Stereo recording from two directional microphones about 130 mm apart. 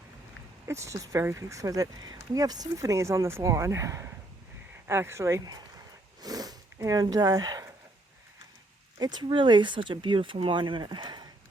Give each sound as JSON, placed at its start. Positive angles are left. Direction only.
{"t": 0.7, "sound": "speech", "side_deg": -25}
{"t": 9.0, "sound": "speech", "side_deg": -35}